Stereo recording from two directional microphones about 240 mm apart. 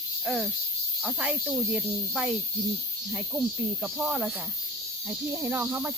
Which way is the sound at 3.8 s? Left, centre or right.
Centre.